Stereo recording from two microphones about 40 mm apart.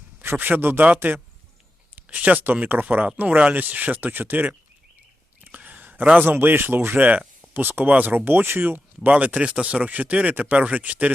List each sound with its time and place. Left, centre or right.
0.2 s speech: right
1.1 s speech: right
2.1 s speech: right
2.8 s speech: right
5.5 s a sound: right
6.2 s speech: right
7.5 s speech: right
9.0 s speech: right
10.8 s speech: right